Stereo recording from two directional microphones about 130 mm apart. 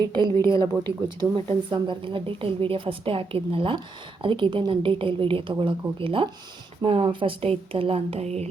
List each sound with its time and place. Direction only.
0.4 s a woman's voice: 35° right (ahead or behind); by 8.4 s 55° right (ahead or behind)